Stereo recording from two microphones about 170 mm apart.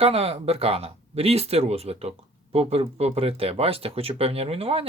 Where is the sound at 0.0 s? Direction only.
35° right (ahead or behind).